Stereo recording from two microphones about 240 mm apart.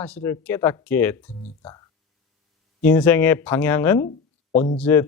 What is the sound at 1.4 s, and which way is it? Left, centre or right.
Speech, left.